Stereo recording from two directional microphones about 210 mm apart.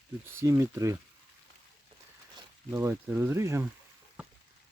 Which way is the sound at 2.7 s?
10° right (ahead or behind).